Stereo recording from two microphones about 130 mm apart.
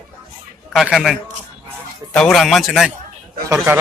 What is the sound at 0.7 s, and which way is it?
Speech, centre (ahead or behind).